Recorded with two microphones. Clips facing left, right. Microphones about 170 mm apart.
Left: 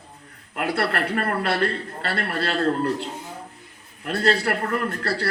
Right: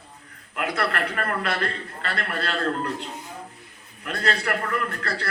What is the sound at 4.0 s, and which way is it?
A man's voice, 35° left (ahead or behind).